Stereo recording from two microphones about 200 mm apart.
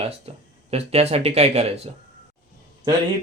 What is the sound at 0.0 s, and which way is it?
Speech, 30° right (ahead or behind).